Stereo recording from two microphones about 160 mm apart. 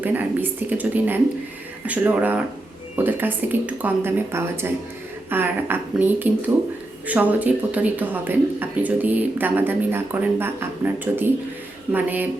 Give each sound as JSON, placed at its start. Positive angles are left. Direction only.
{"t": 0.0, "sound": "speech", "side_deg": -10}